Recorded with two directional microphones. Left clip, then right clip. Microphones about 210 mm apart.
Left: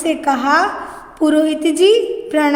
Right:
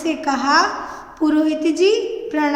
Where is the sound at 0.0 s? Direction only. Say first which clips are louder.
Left 4 dB; 30° left (ahead or behind).